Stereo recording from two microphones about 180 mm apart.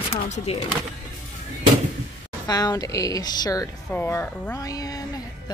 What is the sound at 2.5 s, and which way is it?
Speech, 20° left (ahead or behind).